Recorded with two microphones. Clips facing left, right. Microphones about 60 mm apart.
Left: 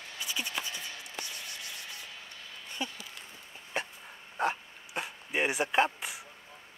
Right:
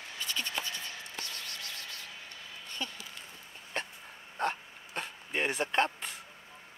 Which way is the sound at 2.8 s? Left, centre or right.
Centre.